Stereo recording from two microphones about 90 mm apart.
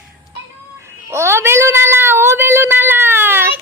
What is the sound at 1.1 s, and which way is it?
Cat, 30° right (ahead or behind).